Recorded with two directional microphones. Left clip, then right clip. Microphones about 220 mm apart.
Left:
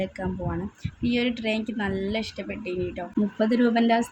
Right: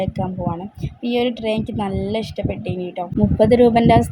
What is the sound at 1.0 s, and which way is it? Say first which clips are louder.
A woman's voice: right 6 dB; 10° right (ahead or behind).